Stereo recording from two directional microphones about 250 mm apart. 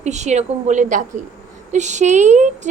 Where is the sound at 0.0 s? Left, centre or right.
Right.